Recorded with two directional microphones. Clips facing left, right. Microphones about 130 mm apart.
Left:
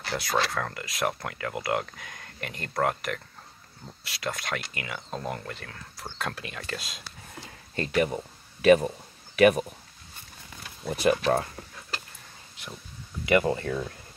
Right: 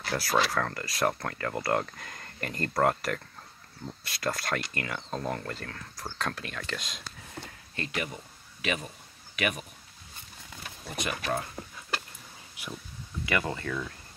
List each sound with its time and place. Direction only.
0.0 s speech: centre (ahead or behind)
7.7 s speech: 35° left (ahead or behind)
8.6 s a sound: 40° left (ahead or behind)
10.9 s speech: 40° left (ahead or behind)
12.6 s a sound: 10° right (ahead or behind)
13.2 s speech: 25° left (ahead or behind)